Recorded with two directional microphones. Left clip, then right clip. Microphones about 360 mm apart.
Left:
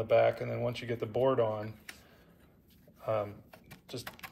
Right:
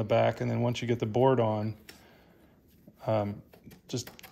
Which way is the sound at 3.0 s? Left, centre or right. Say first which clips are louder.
Right 3 dB; right.